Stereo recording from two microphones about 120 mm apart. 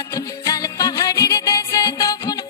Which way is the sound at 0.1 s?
30° left (ahead or behind).